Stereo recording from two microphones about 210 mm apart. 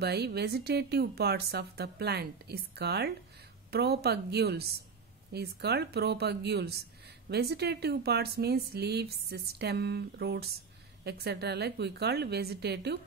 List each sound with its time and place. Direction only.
0.0 s speech: 50° right (ahead or behind)